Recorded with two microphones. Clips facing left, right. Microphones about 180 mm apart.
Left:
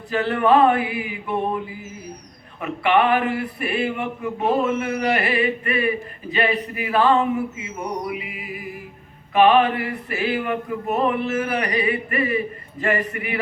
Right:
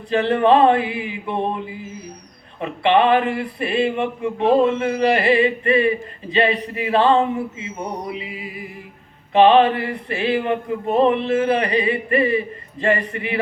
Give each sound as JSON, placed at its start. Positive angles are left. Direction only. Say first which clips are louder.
{"t": 0.1, "sound": "speech", "louder": "right 3 dB", "side_deg": -25}